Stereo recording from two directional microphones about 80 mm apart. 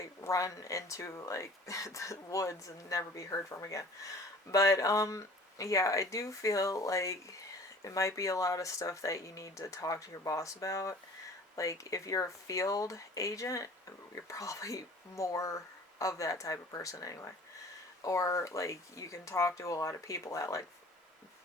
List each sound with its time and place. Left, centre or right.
0.0 s speech: left